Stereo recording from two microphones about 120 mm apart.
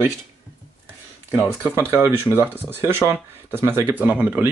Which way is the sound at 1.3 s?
20° right (ahead or behind).